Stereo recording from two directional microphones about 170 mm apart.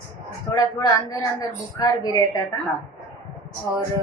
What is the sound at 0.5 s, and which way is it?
Speech, 20° left (ahead or behind).